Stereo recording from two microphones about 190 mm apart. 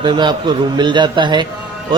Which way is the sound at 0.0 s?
25° right (ahead or behind).